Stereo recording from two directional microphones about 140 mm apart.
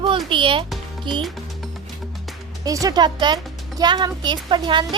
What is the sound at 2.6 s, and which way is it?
A woman's voice, 25° right (ahead or behind).